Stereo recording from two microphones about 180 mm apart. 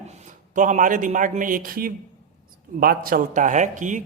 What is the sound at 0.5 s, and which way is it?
Speech, 45° right (ahead or behind).